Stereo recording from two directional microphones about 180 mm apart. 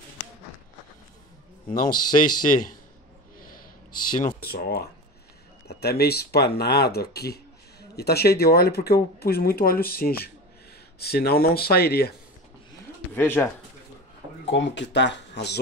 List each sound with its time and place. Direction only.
1.7 s speech: 50° left (ahead or behind)
3.3 s a sound: 50° left (ahead or behind)
4.5 s speech: 60° left (ahead or behind)
13.1 s speech: 10° left (ahead or behind)
14.4 s speech: 80° left